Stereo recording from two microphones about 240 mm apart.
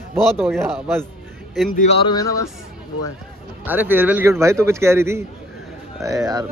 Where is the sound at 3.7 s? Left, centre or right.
Centre.